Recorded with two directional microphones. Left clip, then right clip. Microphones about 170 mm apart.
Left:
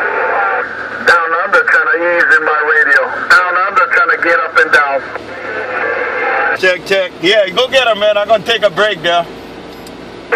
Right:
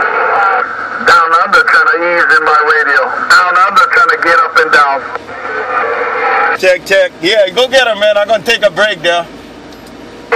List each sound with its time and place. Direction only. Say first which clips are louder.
0.0 s radio: right 3 dB; 40° right (ahead or behind)
5.5 s vehicle: right 3 dB; 40° right (ahead or behind)
8.7 s a man's voice: right 1 dB; 40° right (ahead or behind)